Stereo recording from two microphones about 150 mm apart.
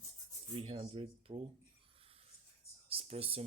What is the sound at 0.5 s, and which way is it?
Speech, 40° right (ahead or behind).